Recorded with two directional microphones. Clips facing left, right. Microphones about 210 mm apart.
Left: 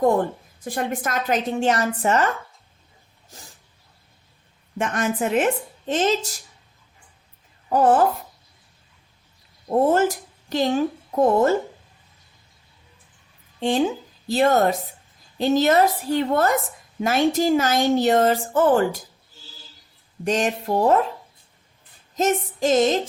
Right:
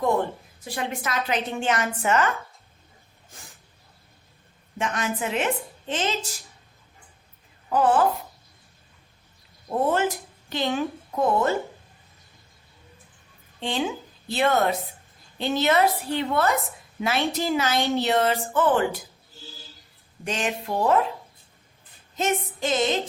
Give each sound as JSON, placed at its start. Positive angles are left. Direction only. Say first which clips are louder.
{"t": 0.6, "sound": "a woman's voice", "louder": "left 4 dB", "side_deg": 50}
{"t": 4.8, "sound": "a woman's voice", "louder": "left 4 dB", "side_deg": 45}
{"t": 7.7, "sound": "a woman's voice", "louder": "left 3 dB", "side_deg": 45}
{"t": 9.6, "sound": "a woman's voice", "louder": "left 5 dB", "side_deg": 40}
{"t": 13.6, "sound": "a woman's voice", "louder": "left 6 dB", "side_deg": 40}
{"t": 20.2, "sound": "a woman's voice", "louder": "left 6 dB", "side_deg": 40}
{"t": 22.1, "sound": "a woman's voice", "louder": "left 4 dB", "side_deg": 40}